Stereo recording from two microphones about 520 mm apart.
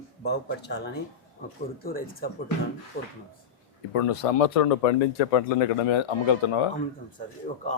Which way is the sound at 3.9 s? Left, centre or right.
Left.